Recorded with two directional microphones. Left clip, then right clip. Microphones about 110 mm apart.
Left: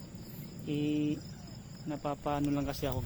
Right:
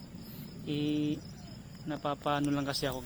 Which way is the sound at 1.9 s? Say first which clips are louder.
Right 2 dB; centre (ahead or behind).